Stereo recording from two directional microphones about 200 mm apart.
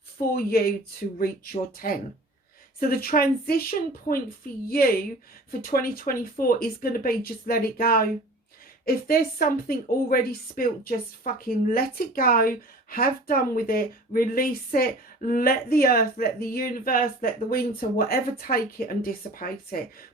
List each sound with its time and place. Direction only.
0.3 s a woman's voice: 50° left (ahead or behind)
1.8 s a woman's voice: 45° left (ahead or behind)